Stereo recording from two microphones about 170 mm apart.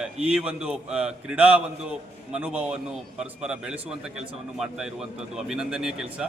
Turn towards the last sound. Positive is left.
turn(degrees=-5)  # may be behind; listen again after turning